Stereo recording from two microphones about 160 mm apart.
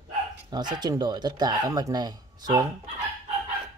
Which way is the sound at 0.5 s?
25° right (ahead or behind).